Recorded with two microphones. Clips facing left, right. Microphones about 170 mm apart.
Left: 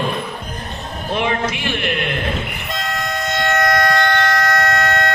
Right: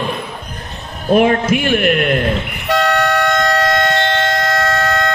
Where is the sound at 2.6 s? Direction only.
75° right (ahead or behind).